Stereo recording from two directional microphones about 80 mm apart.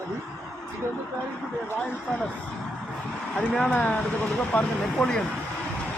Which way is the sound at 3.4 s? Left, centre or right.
Centre.